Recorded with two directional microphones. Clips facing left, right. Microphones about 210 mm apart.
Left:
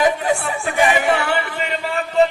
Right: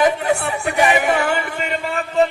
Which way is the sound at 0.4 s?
65° right (ahead or behind).